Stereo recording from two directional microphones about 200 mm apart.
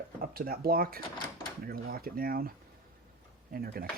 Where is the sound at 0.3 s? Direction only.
50° right (ahead or behind).